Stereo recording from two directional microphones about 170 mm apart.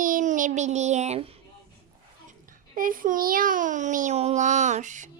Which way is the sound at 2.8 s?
55° right (ahead or behind).